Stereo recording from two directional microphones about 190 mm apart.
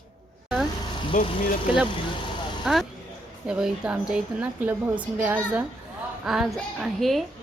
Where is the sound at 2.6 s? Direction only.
Centre (ahead or behind).